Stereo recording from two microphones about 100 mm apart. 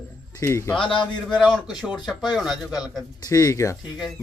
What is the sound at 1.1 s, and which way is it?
Speech, 10° left (ahead or behind).